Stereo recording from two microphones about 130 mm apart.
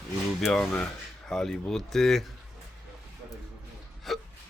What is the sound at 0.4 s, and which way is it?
Speech, 5° left (ahead or behind).